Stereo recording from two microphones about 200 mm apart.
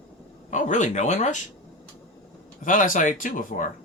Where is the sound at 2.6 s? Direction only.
40° left (ahead or behind).